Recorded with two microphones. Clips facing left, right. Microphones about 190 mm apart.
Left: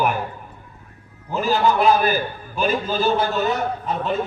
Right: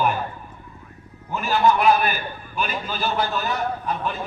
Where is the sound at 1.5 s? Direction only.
35° left (ahead or behind).